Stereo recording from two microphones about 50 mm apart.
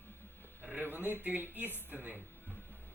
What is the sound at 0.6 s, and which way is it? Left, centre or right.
Speech, right.